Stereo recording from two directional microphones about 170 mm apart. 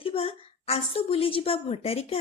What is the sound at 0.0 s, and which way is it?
A woman's voice, 35° left (ahead or behind).